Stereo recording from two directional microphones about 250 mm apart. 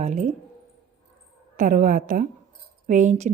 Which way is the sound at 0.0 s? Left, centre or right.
Right.